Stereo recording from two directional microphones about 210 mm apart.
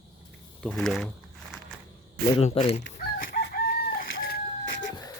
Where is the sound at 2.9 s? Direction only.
45° left (ahead or behind).